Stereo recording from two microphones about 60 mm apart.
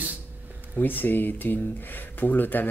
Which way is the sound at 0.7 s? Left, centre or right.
Left.